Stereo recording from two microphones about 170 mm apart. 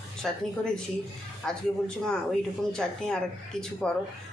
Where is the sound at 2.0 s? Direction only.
5° left (ahead or behind).